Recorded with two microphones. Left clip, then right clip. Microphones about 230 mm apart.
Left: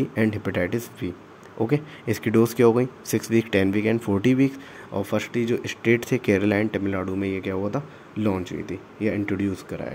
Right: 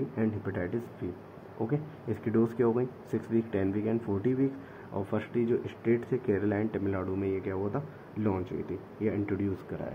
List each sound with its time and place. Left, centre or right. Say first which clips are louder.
0.2 s speech: left 10 dB; left
4.9 s speech: left 7 dB; left